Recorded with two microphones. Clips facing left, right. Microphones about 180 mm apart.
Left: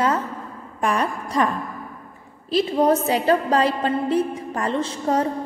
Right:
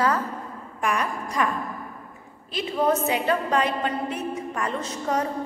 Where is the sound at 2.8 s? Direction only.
35° left (ahead or behind).